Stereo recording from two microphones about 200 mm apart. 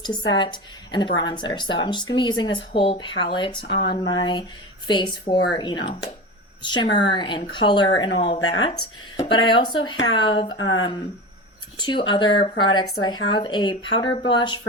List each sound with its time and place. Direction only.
0.3 s a woman's voice: 25° left (ahead or behind)